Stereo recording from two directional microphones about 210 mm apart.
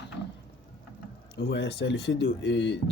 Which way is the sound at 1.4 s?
55° left (ahead or behind).